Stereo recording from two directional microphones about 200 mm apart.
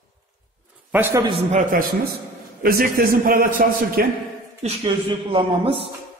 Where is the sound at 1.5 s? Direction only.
45° right (ahead or behind).